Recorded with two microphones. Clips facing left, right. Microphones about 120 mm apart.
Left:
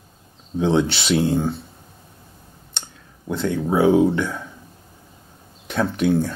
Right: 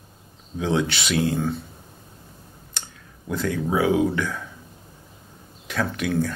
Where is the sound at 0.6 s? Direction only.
30° left (ahead or behind).